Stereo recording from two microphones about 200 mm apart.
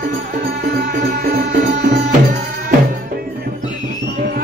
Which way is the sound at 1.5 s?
55° right (ahead or behind).